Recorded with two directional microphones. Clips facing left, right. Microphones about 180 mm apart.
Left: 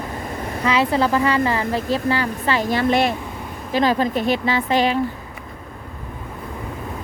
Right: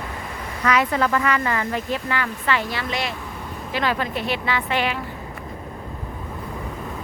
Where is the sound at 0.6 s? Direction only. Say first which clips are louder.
Left 2 dB; 30° left (ahead or behind); by 3.1 s 50° left (ahead or behind).